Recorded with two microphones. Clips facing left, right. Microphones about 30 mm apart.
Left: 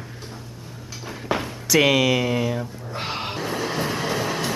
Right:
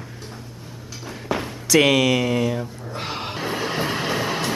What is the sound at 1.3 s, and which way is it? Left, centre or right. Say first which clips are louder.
Music: even; centre.